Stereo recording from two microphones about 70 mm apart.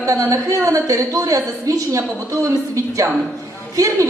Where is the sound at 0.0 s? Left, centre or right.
Right.